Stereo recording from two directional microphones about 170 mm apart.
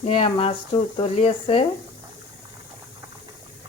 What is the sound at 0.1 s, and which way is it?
Speech, 35° left (ahead or behind).